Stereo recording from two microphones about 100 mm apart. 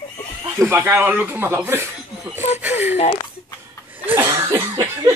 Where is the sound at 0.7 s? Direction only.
25° right (ahead or behind).